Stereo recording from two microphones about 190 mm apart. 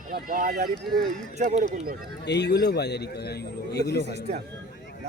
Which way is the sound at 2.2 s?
65° left (ahead or behind).